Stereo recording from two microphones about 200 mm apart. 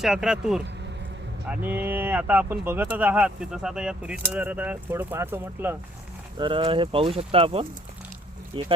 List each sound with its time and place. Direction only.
0.0 s speech: centre (ahead or behind)
6.3 s speech: 25° right (ahead or behind)